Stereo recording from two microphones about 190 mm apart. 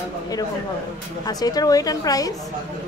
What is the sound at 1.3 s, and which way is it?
Speech, 20° left (ahead or behind).